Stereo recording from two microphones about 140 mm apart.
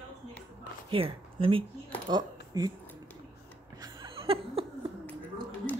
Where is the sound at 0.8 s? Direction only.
40° right (ahead or behind).